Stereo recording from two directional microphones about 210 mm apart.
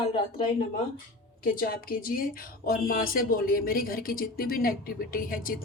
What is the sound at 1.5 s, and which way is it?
Speech, 45° left (ahead or behind).